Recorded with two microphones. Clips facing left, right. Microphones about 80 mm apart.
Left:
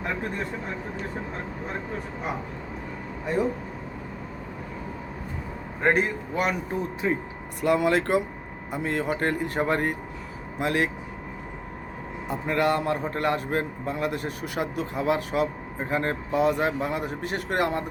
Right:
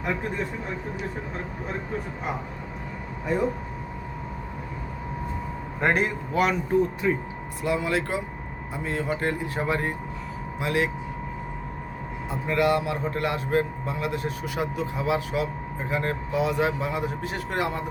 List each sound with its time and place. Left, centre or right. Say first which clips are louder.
5.8 s speech: left 1 dB; centre
7.0 s speech: right 1 dB; left
7.6 s a man's voice: left 4 dB; left
12.5 s a man's voice: right 1 dB; left